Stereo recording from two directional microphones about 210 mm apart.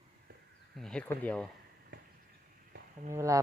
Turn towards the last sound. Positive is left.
turn(degrees=-15)  # may be behind; listen again after turning